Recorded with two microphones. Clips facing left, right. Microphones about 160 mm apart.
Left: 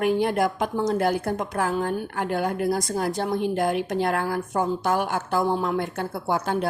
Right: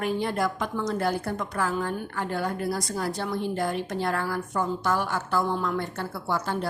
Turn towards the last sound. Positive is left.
turn(degrees=50)  # may be behind; listen again after turning